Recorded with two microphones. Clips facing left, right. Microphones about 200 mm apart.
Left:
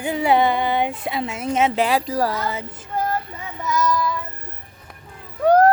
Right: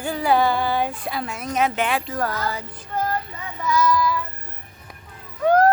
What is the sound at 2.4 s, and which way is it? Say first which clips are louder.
Speech: left 1 dB; 20° left (ahead or behind).